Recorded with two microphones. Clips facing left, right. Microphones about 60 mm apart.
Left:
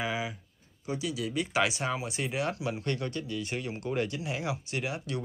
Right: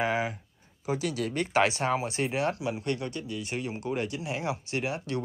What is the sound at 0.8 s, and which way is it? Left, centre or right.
Speech, right.